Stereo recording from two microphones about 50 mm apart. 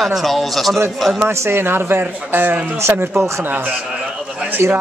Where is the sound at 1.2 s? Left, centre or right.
Right.